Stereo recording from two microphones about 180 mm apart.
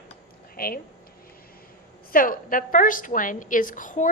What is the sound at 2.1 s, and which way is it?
A woman's voice, 50° left (ahead or behind).